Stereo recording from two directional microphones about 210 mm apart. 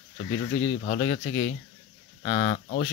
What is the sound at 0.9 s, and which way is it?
Speech, 35° left (ahead or behind).